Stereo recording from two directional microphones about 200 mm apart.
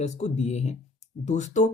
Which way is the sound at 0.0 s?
35° left (ahead or behind).